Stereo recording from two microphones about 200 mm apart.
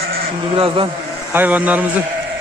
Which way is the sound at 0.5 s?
25° right (ahead or behind).